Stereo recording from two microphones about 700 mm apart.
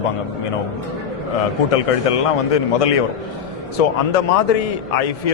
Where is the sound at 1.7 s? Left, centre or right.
Left.